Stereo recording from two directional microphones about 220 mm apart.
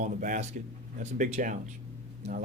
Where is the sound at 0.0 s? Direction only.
35° right (ahead or behind).